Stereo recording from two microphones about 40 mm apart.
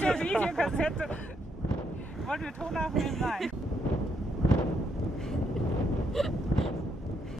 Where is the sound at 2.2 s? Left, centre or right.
Centre.